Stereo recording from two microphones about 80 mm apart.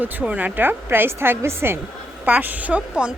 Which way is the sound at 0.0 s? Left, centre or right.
Right.